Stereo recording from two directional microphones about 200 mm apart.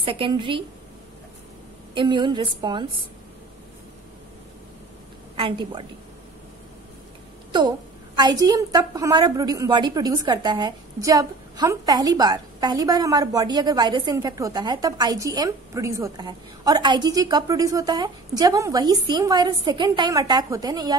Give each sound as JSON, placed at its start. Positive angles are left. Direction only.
{"t": 0.0, "sound": "a woman's voice", "side_deg": -25}
{"t": 2.0, "sound": "a woman's voice", "side_deg": -20}
{"t": 5.3, "sound": "a woman's voice", "side_deg": -25}
{"t": 8.2, "sound": "a woman's voice", "side_deg": -20}